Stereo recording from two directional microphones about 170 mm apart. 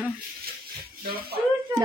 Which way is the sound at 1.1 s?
65° right (ahead or behind).